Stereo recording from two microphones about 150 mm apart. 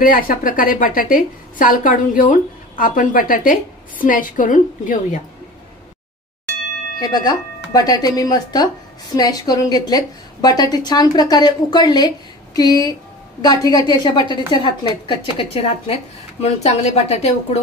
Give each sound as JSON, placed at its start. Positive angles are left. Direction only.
{"t": 0.0, "sound": "a woman's voice", "side_deg": 65}
{"t": 7.0, "sound": "a woman's voice", "side_deg": 25}